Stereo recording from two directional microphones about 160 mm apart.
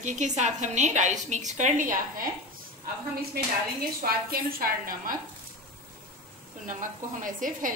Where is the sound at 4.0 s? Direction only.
65° right (ahead or behind).